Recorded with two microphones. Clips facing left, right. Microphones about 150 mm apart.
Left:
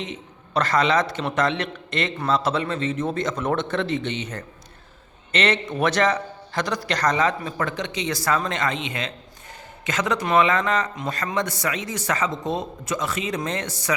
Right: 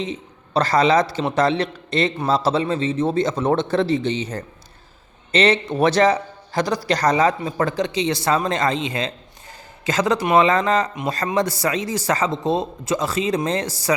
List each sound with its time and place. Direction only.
0.0 s a man's voice: 35° right (ahead or behind)